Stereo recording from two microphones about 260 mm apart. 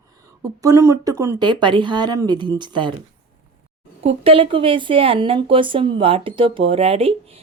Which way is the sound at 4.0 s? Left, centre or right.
Right.